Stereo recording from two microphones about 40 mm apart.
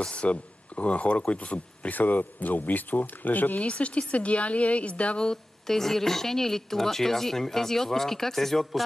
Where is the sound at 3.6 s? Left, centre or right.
Left.